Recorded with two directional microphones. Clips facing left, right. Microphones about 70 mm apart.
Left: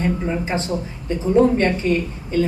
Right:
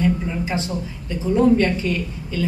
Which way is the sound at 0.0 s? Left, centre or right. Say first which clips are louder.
Even; left.